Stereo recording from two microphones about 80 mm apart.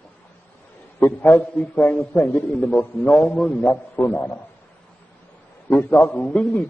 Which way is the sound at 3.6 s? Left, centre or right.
Left.